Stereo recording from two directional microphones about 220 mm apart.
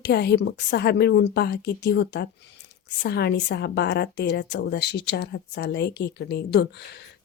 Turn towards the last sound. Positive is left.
turn(degrees=50)  # may be behind; listen again after turning